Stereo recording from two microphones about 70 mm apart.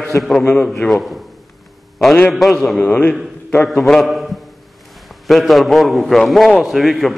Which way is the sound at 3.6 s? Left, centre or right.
Centre.